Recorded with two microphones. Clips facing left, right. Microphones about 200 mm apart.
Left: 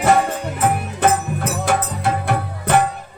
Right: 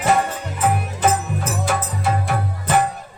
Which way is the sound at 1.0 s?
60° left (ahead or behind).